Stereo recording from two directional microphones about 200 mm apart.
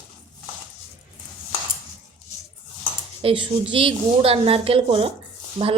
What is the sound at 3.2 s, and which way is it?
A woman's voice, 25° right (ahead or behind).